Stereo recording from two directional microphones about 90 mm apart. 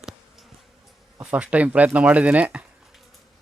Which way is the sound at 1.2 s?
15° right (ahead or behind).